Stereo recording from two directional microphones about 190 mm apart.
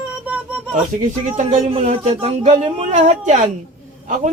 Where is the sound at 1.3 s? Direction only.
40° right (ahead or behind).